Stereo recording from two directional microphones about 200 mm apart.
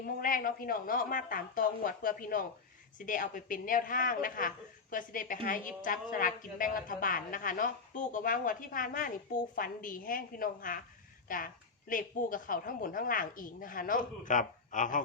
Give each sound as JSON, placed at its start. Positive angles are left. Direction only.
{"t": 0.0, "sound": "a woman's voice", "side_deg": 45}